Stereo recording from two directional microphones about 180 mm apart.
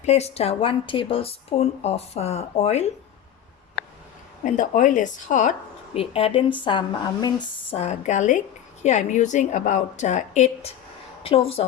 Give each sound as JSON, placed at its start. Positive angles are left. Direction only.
{"t": 0.0, "sound": "a woman's voice", "side_deg": 35}
{"t": 4.4, "sound": "a woman's voice", "side_deg": 45}
{"t": 7.8, "sound": "a woman's voice", "side_deg": 40}